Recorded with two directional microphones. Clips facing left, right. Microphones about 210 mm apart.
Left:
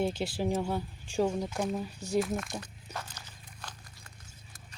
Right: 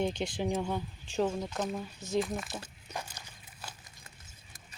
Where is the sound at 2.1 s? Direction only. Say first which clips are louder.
Left 2 dB; centre (ahead or behind).